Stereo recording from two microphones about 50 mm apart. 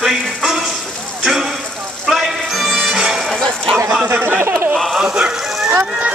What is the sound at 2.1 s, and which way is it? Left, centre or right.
Music, centre.